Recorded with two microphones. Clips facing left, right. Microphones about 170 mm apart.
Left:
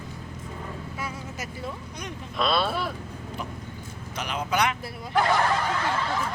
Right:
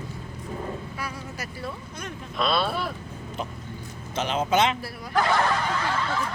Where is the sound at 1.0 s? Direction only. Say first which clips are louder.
Even; 20° left (ahead or behind).